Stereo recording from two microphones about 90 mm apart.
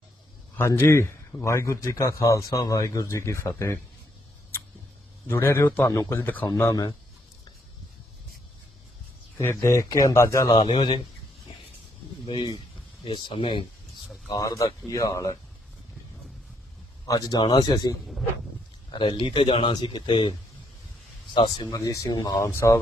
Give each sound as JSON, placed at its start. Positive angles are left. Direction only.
{"t": 0.7, "sound": "a man's voice", "side_deg": 30}
{"t": 5.3, "sound": "a man's voice", "side_deg": 25}
{"t": 5.9, "sound": "a man's voice", "side_deg": 40}
{"t": 6.1, "sound": "a man's voice", "side_deg": 20}
{"t": 9.4, "sound": "a man's voice", "side_deg": 30}
{"t": 10.7, "sound": "speech", "side_deg": 80}
{"t": 12.2, "sound": "speech", "side_deg": 80}
{"t": 14.3, "sound": "a man's voice", "side_deg": 40}
{"t": 17.1, "sound": "speech", "side_deg": 45}
{"t": 17.4, "sound": "speech", "side_deg": 55}
{"t": 18.9, "sound": "speech", "side_deg": 65}
{"t": 19.7, "sound": "speech", "side_deg": 55}
{"t": 21.3, "sound": "speech", "side_deg": 60}
{"t": 21.7, "sound": "a man's voice", "side_deg": 40}